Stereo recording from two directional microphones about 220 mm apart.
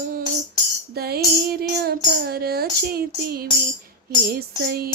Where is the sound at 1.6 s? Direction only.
45° right (ahead or behind).